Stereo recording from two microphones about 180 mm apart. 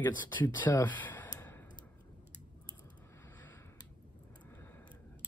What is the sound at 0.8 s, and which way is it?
Speech, 10° left (ahead or behind).